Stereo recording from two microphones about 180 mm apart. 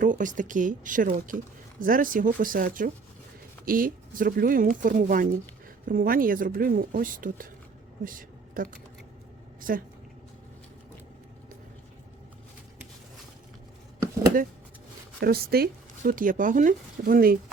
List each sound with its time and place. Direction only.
0.0 s speech: 45° right (ahead or behind)
8.0 s a sound: 50° right (ahead or behind)
9.6 s a woman's voice: 50° right (ahead or behind)
15.2 s speech: 60° right (ahead or behind)